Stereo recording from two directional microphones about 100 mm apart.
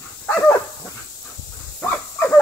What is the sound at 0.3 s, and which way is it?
Dog, 25° left (ahead or behind).